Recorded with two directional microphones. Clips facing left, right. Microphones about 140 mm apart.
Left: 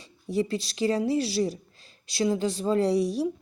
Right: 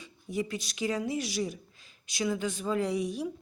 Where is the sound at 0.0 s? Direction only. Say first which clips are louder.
Left 6 dB; 35° left (ahead or behind).